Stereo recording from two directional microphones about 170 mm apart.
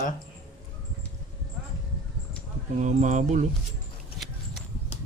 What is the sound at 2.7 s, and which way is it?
Speech, 45° right (ahead or behind).